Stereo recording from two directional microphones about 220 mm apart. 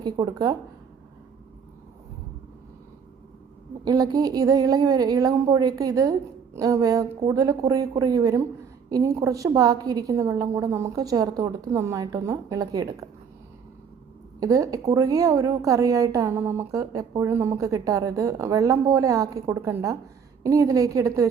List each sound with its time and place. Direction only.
0.0 s a woman's voice: 15° right (ahead or behind)
3.8 s a woman's voice: 15° right (ahead or behind)
14.3 s a woman's voice: 15° right (ahead or behind)